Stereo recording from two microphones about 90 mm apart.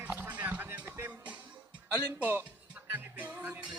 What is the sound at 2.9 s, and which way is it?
Music, 15° right (ahead or behind).